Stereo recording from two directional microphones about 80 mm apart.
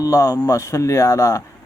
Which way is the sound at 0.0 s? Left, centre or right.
Left.